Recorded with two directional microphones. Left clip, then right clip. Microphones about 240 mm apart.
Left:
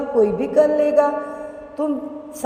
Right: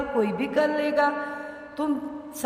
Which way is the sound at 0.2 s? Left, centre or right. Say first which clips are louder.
Left 9 dB; centre.